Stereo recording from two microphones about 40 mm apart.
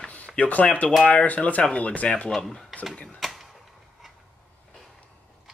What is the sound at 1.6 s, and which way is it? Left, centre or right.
Speech, left.